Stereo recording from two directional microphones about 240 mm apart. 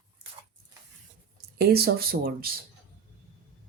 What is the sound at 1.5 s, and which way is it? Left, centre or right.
Speech, right.